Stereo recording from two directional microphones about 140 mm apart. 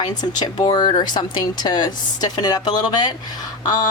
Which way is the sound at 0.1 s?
30° left (ahead or behind).